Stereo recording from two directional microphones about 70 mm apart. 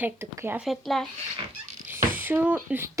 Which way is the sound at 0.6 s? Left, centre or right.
Centre.